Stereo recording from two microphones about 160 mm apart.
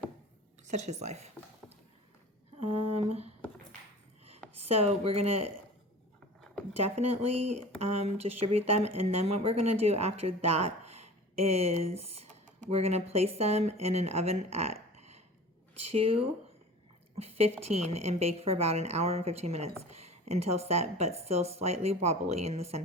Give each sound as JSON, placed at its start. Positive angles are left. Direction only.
{"t": 0.7, "sound": "a woman's voice", "side_deg": -45}
{"t": 2.6, "sound": "a woman's voice", "side_deg": -40}
{"t": 4.7, "sound": "a woman's voice", "side_deg": -35}
{"t": 6.7, "sound": "a woman's voice", "side_deg": -40}